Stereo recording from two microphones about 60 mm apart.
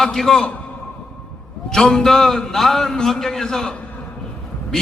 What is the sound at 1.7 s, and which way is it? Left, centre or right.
A man's voice, centre.